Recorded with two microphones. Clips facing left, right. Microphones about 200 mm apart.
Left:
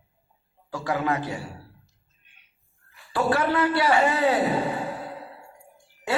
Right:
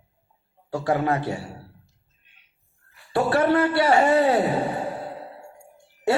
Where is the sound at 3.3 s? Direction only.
50° right (ahead or behind).